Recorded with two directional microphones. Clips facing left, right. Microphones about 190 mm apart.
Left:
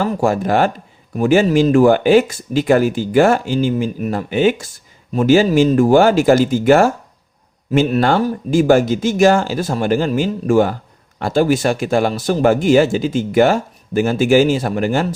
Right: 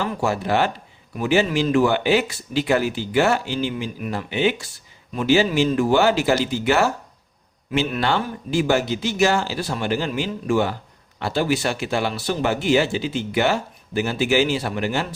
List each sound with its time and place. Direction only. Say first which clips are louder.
0.0 s speech: left 6 dB; 45° left (ahead or behind)